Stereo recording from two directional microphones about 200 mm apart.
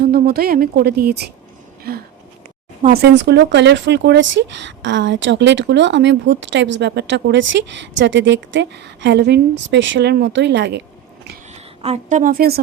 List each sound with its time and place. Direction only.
0.0 s speech: 50° right (ahead or behind)
11.5 s a woman's voice: 35° right (ahead or behind)